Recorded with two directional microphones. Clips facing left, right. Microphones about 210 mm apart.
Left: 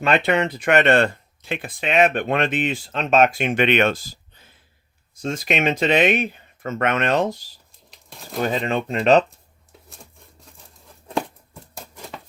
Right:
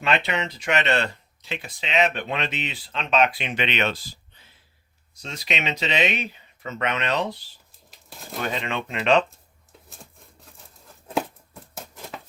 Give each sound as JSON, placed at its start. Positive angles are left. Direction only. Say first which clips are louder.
{"t": 0.0, "sound": "speech", "louder": "left 6 dB", "side_deg": 50}
{"t": 7.9, "sound": "crumpling", "louder": "left 1 dB", "side_deg": 0}
{"t": 8.4, "sound": "speech", "louder": "left 6 dB", "side_deg": 40}
{"t": 11.8, "sound": "patter", "louder": "left 1 dB", "side_deg": 0}